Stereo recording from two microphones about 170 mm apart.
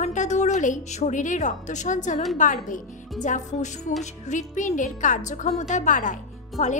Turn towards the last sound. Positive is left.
turn(degrees=45)  # may be behind; listen again after turning